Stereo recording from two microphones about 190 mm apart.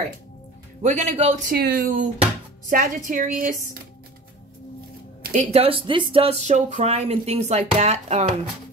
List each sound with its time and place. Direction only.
0.8 s speech: 40° right (ahead or behind)
1.5 s speech: 55° right (ahead or behind)
2.7 s a woman's voice: 45° right (ahead or behind)
5.2 s speech: 40° right (ahead or behind)